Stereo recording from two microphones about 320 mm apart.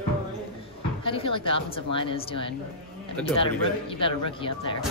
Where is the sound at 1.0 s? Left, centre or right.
Centre.